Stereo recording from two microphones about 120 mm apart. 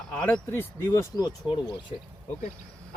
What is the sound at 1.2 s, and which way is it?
Speech, 35° left (ahead or behind).